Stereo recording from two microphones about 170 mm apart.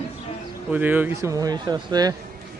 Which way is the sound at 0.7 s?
10° right (ahead or behind).